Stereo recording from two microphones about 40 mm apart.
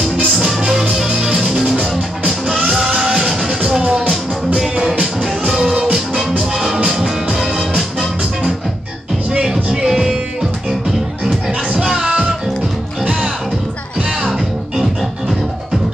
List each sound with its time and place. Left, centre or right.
0.0 s music: centre
5.3 s music: centre
9.8 s music: centre
11.7 s music: centre
13.0 s music: right
14.8 s music: centre